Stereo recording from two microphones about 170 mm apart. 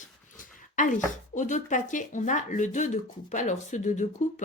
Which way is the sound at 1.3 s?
45° left (ahead or behind).